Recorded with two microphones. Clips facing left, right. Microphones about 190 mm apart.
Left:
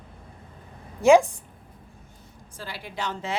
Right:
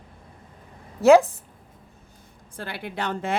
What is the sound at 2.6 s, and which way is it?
Speech, 60° right (ahead or behind).